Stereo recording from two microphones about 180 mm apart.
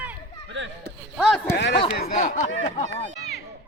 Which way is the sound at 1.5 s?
70° left (ahead or behind).